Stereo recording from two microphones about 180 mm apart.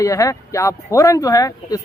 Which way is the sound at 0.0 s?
15° left (ahead or behind).